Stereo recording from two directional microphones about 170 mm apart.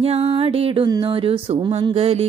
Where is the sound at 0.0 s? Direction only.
35° right (ahead or behind).